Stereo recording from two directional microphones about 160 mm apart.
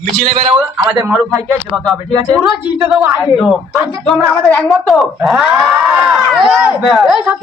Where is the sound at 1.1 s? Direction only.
Centre (ahead or behind).